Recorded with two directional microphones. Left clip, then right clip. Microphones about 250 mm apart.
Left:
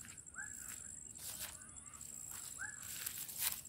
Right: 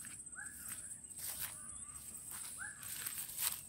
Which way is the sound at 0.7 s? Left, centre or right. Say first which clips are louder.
Right 1 dB; centre.